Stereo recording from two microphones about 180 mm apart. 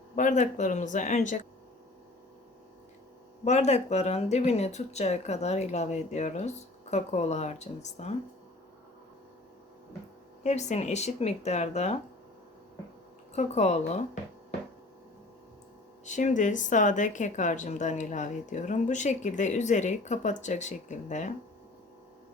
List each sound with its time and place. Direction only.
0.2 s speech: 45° left (ahead or behind)
3.4 s speech: 40° left (ahead or behind)
10.4 s speech: 40° left (ahead or behind)
13.3 s speech: 40° left (ahead or behind)
16.0 s speech: 45° left (ahead or behind)